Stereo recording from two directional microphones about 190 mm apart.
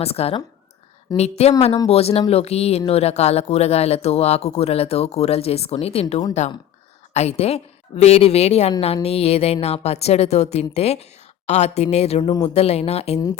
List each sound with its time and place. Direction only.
0.0 s speech: 30° left (ahead or behind)